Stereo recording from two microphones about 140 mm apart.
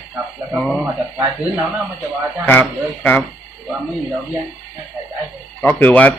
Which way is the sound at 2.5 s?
15° left (ahead or behind).